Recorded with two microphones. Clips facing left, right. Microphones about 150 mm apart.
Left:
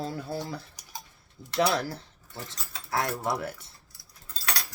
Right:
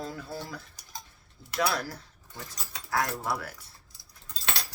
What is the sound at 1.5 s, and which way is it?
Speech, 30° left (ahead or behind).